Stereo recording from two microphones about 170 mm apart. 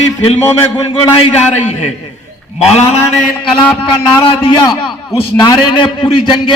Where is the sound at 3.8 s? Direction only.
30° left (ahead or behind).